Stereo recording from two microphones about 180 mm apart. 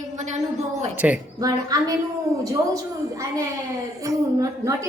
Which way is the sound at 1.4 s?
20° right (ahead or behind).